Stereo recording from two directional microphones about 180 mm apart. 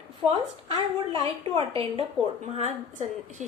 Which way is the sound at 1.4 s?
30° right (ahead or behind).